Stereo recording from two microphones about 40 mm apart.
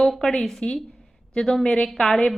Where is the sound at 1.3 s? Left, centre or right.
Centre.